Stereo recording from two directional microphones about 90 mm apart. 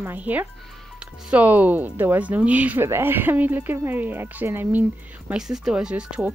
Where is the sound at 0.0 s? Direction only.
20° right (ahead or behind).